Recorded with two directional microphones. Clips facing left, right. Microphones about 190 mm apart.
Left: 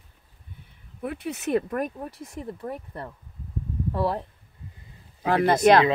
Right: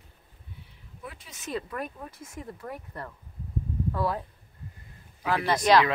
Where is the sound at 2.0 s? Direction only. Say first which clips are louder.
Left 5 dB; 35° left (ahead or behind).